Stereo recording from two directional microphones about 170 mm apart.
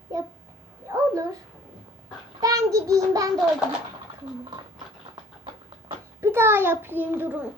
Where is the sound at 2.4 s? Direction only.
20° right (ahead or behind).